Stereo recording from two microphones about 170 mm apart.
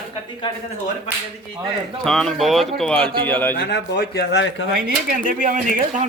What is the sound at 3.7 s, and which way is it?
Speech, 80° left.